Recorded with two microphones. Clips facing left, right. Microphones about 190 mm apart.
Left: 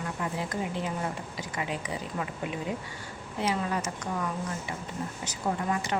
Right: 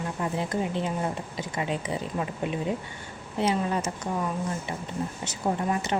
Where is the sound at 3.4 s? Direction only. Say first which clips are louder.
Right 3 dB; 25° right (ahead or behind).